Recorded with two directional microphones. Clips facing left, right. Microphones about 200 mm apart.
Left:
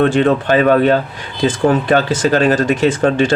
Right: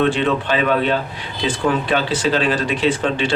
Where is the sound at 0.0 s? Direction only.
45° left (ahead or behind).